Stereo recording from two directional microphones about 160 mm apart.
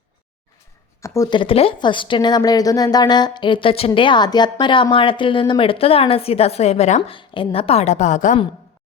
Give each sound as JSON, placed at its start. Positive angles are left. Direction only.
{"t": 1.0, "sound": "speech", "side_deg": 20}
{"t": 7.2, "sound": "a woman's voice", "side_deg": 35}